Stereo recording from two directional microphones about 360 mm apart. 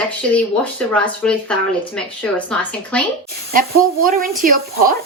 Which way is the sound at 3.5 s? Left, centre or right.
Right.